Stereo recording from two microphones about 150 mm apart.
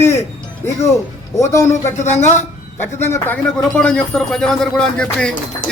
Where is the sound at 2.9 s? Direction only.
15° left (ahead or behind).